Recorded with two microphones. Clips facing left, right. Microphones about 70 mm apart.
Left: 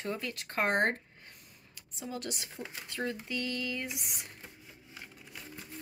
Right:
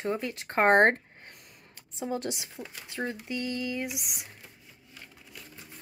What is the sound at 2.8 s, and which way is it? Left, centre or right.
Speech, centre.